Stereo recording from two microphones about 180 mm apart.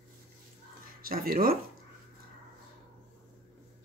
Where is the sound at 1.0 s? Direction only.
55° right (ahead or behind).